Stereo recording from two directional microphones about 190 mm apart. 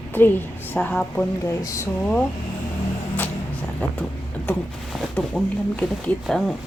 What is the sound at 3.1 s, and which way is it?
Vehicle, 10° left (ahead or behind).